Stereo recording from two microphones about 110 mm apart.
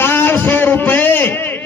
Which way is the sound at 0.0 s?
20° left (ahead or behind).